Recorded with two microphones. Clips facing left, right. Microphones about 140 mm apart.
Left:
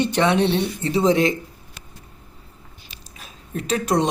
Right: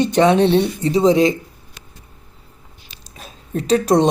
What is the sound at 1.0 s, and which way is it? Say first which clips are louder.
Speech: right 4 dB; 30° right (ahead or behind).